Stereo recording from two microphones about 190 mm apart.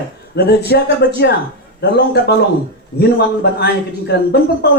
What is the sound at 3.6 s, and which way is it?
Speech, 60° left (ahead or behind).